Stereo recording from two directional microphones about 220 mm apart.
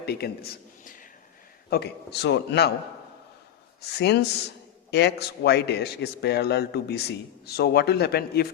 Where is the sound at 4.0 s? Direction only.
50° left (ahead or behind).